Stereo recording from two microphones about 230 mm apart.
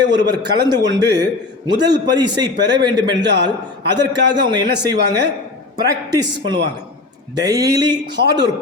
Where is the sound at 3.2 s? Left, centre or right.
Right.